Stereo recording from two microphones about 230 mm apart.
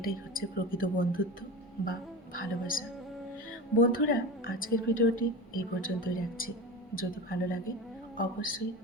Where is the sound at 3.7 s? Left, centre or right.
Left.